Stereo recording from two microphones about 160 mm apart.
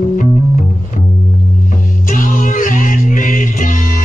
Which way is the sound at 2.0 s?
55° left (ahead or behind).